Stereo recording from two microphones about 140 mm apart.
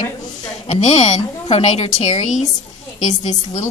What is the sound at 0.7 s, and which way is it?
A woman's voice, 55° left (ahead or behind).